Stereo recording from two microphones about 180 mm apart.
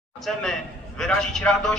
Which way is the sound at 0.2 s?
Centre (ahead or behind).